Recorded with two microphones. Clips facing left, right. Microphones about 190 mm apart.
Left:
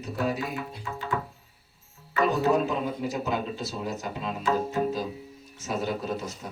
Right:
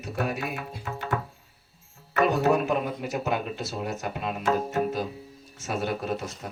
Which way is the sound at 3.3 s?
60° right (ahead or behind).